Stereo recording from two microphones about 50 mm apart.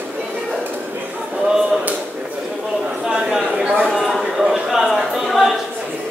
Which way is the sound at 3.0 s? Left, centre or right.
Centre.